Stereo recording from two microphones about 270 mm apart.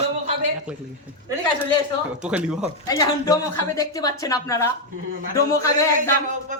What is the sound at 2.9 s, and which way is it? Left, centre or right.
A woman's voice, centre.